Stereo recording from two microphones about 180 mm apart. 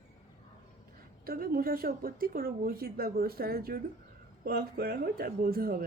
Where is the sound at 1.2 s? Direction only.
55° right (ahead or behind).